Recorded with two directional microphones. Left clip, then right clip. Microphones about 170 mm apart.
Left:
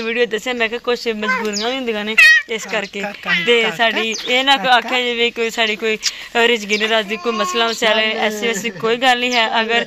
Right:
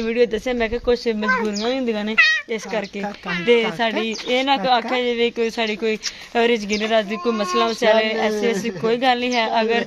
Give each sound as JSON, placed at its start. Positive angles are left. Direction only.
{"t": 0.0, "sound": "speech", "side_deg": 10}
{"t": 2.1, "sound": "speech", "side_deg": -60}
{"t": 3.4, "sound": "speech", "side_deg": 10}